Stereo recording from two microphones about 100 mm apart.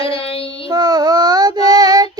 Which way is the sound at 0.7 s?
40° right (ahead or behind).